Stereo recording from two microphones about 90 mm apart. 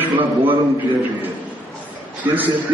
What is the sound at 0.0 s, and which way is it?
Speech, 20° right (ahead or behind).